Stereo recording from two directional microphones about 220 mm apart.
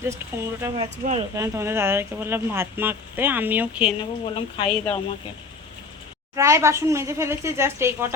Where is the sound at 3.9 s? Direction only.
25° left (ahead or behind).